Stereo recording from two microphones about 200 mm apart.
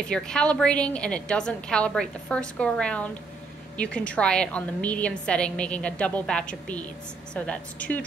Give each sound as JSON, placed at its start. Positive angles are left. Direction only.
{"t": 0.1, "sound": "a woman's voice", "side_deg": 5}